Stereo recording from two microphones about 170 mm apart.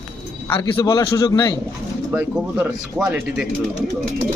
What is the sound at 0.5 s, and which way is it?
A man's voice, 25° left (ahead or behind).